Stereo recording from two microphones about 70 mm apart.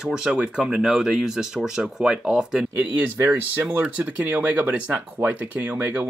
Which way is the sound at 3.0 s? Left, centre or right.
Right.